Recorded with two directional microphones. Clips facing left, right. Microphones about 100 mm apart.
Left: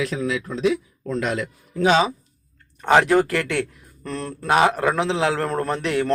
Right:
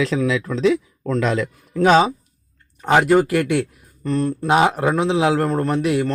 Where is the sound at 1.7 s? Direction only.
50° right (ahead or behind).